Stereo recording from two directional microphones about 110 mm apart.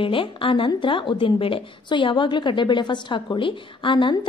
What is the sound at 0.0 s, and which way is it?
A woman's voice, 50° left (ahead or behind).